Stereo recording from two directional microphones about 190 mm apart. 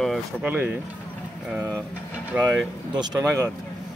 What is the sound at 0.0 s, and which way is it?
Speech, centre (ahead or behind).